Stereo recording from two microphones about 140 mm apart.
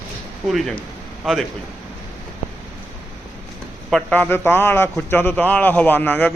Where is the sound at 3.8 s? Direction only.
5° left (ahead or behind).